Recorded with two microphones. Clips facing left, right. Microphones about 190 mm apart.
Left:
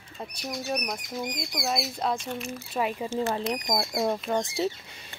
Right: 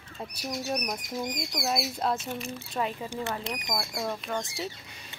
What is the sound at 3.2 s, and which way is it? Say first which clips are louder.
Speech: left 8 dB; 25° left (ahead or behind).